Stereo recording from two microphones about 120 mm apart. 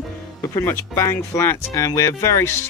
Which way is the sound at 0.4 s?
20° left (ahead or behind).